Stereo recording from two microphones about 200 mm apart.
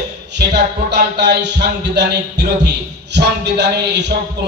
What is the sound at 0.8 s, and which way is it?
Music, 60° right (ahead or behind).